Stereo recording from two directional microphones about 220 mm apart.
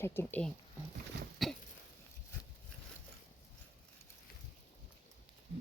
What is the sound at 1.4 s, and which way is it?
Throat clearing, centre (ahead or behind).